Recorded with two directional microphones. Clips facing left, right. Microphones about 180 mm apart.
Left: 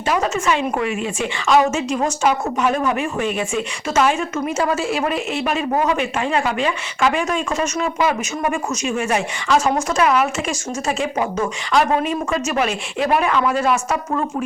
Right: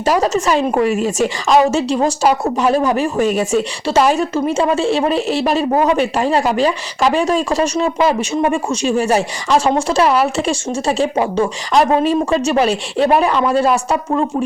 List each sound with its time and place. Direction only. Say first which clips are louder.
0.0 s a woman's voice: right 5 dB; 35° right (ahead or behind)